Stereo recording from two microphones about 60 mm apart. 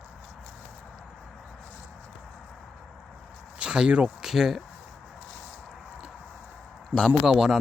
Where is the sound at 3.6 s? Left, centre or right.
Centre.